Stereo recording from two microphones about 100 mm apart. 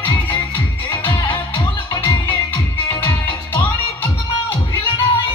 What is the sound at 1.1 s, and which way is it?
Music, 50° left (ahead or behind).